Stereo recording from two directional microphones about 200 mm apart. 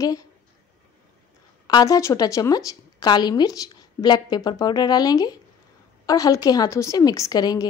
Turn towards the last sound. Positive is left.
turn(degrees=20)  # may be behind; listen again after turning